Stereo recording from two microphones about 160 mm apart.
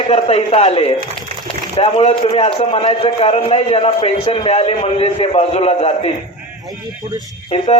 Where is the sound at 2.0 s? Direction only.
40° left (ahead or behind).